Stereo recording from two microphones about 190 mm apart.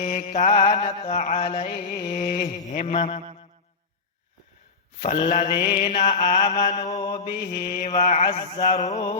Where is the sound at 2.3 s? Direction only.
40° left (ahead or behind).